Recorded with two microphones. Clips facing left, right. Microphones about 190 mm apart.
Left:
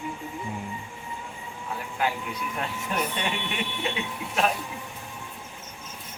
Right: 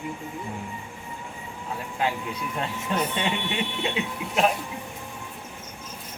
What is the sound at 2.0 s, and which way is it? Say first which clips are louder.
Speech: right 1 dB; 25° right (ahead or behind).